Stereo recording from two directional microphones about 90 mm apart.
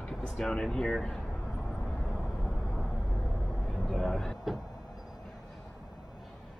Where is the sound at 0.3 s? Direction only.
5° left (ahead or behind).